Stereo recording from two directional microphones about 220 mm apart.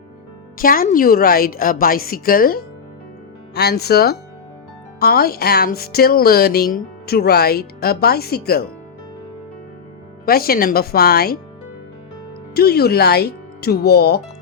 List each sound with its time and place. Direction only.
0.6 s a woman's voice: 40° left (ahead or behind)
10.2 s speech: 40° left (ahead or behind)
12.5 s speech: 45° left (ahead or behind)